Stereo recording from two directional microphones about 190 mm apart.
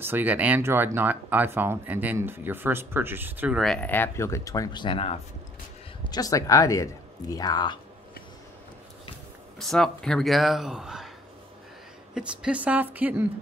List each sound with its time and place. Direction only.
0.0 s speech: 10° right (ahead or behind); by 5.2 s 30° left (ahead or behind)
6.0 s speech: 20° left (ahead or behind)
9.6 s speech: centre (ahead or behind)
12.1 s speech: 5° right (ahead or behind)